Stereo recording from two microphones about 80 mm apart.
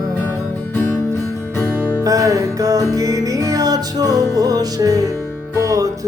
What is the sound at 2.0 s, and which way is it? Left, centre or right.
Music, right.